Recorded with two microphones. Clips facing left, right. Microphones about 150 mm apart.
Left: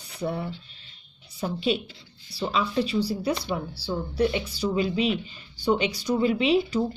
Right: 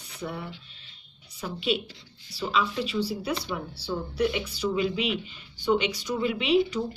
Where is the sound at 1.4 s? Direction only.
35° left (ahead or behind).